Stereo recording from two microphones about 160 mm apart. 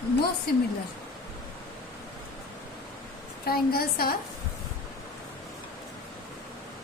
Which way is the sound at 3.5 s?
70° left (ahead or behind).